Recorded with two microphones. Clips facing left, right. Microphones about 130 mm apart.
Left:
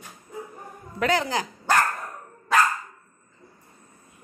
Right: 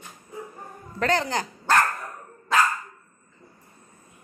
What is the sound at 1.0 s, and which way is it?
Speech, 5° left (ahead or behind).